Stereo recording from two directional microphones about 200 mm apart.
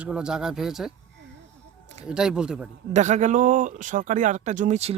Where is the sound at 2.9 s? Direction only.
35° right (ahead or behind).